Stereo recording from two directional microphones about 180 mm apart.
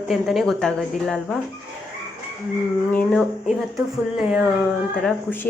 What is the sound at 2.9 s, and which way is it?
Speech, 10° left (ahead or behind).